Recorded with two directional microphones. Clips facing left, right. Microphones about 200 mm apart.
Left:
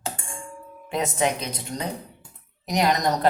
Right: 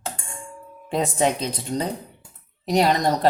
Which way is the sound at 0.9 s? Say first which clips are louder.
Right 3 dB; 30° right (ahead or behind).